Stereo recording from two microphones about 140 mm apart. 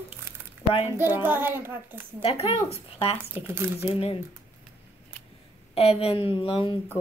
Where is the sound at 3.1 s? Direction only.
15° right (ahead or behind).